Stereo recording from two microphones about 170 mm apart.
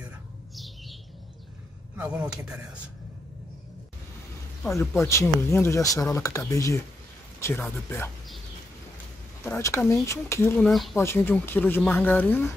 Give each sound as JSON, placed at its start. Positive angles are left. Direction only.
{"t": 2.0, "sound": "a man's voice", "side_deg": -10}
{"t": 5.0, "sound": "speech", "side_deg": 15}
{"t": 9.4, "sound": "speech", "side_deg": 15}
{"t": 10.7, "sound": "speech", "side_deg": 0}
{"t": 11.0, "sound": "speech", "side_deg": 15}